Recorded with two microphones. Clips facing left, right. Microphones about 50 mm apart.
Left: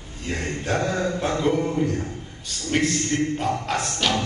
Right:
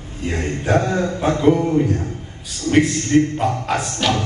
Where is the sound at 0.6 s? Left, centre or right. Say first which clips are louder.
Right 6 dB; centre.